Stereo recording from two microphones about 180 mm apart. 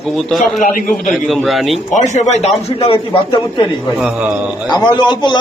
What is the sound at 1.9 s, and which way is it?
A man's voice, 40° left (ahead or behind).